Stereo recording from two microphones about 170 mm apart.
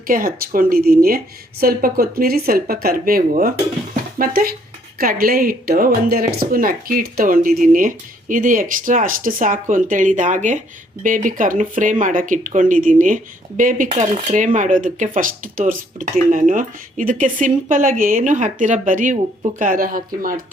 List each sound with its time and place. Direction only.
0.1 s speech: 60° right (ahead or behind)